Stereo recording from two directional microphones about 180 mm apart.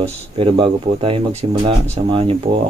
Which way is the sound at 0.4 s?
30° right (ahead or behind).